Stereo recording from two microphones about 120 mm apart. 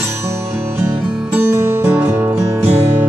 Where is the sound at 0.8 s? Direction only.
15° right (ahead or behind).